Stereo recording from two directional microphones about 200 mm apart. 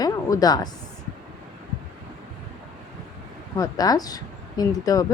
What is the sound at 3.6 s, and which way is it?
Speech, 20° left (ahead or behind).